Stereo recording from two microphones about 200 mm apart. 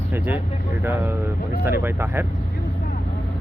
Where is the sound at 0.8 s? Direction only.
10° right (ahead or behind).